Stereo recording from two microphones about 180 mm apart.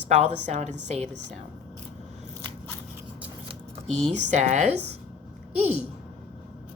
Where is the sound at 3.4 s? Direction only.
40° right (ahead or behind).